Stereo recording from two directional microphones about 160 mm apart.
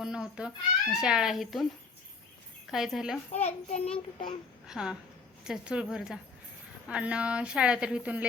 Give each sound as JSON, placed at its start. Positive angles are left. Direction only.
{"t": 0.0, "sound": "a sound", "side_deg": -5}
{"t": 0.9, "sound": "a woman's voice", "side_deg": -5}
{"t": 2.6, "sound": "a woman's voice", "side_deg": 0}
{"t": 3.3, "sound": "a child's voice", "side_deg": 40}
{"t": 4.6, "sound": "a woman's voice", "side_deg": -5}